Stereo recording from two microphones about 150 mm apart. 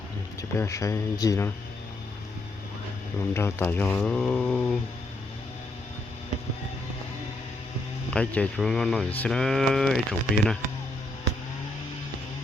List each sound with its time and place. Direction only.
0.5 s speech: 20° left (ahead or behind)
3.3 s speech: 15° left (ahead or behind)
8.1 s speech: 5° left (ahead or behind)